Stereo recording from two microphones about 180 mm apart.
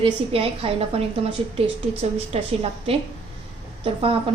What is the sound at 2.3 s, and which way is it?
Speech, 35° right (ahead or behind).